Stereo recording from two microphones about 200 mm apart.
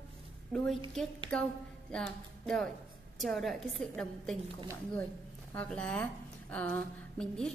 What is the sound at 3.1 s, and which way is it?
A woman's voice, centre (ahead or behind).